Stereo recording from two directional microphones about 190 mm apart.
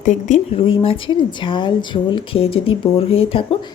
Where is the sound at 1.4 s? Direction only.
25° left (ahead or behind).